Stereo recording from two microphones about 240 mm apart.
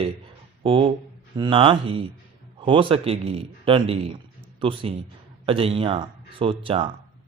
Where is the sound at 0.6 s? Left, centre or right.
Right.